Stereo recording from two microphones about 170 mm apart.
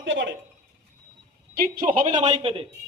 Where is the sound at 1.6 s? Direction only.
55° right (ahead or behind); by 2.7 s 35° right (ahead or behind).